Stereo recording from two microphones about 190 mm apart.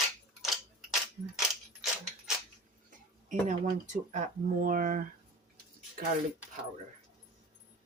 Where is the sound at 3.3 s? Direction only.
40° right (ahead or behind).